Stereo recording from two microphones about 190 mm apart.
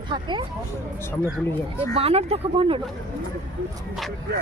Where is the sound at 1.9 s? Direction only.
30° right (ahead or behind).